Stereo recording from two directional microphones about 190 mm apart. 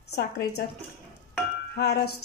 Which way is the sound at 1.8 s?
55° left (ahead or behind).